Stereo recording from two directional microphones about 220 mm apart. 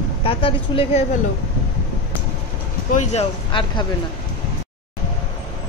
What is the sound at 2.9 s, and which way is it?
Speech, 25° left (ahead or behind).